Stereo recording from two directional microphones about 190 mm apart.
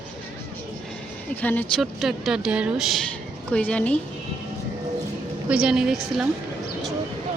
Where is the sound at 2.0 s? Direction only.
Centre (ahead or behind).